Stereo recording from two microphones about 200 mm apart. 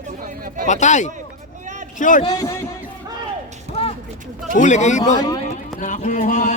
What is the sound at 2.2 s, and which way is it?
Speech, 20° left (ahead or behind).